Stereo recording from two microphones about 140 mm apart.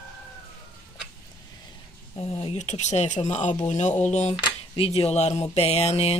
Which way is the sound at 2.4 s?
55° left (ahead or behind).